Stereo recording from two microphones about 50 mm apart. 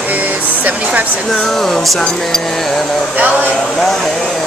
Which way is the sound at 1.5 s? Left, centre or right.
Centre.